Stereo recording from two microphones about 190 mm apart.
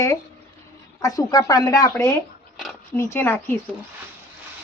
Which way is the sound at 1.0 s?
20° left (ahead or behind).